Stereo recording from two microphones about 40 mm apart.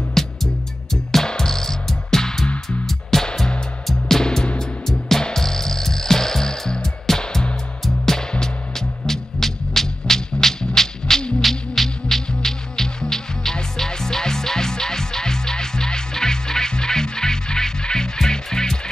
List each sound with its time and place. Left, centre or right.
0.1 s music: centre
2.4 s music: left
2.9 s music: centre